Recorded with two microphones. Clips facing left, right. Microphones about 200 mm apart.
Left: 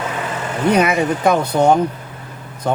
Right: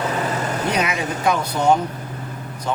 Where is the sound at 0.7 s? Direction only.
55° left (ahead or behind).